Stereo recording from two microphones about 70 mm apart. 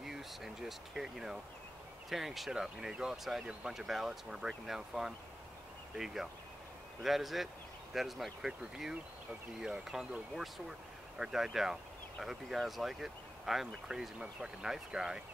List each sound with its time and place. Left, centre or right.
0.0 s speech: centre
11.1 s speech: centre